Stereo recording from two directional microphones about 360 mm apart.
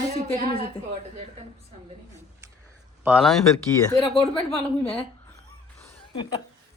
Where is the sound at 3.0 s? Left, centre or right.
Centre.